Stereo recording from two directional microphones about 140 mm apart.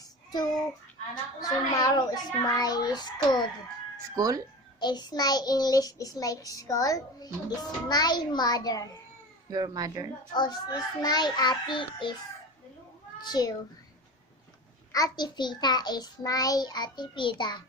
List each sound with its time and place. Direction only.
0.0 s child singing: 30° left (ahead or behind)
4.1 s speech: 25° right (ahead or behind)
4.8 s child singing: 30° left (ahead or behind)
9.5 s speech: 25° right (ahead or behind)
10.3 s a child's voice: 30° left (ahead or behind)
13.2 s child singing: 30° left (ahead or behind)
14.9 s a child's voice: 30° left (ahead or behind)